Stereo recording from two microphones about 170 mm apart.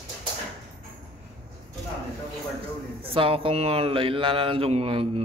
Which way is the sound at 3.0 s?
35° right (ahead or behind).